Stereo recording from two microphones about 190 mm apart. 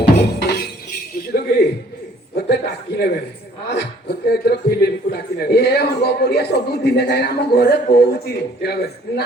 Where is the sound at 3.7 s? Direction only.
60° left (ahead or behind).